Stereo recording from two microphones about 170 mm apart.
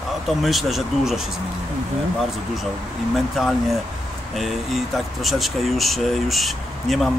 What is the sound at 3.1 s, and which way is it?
Speech, centre (ahead or behind).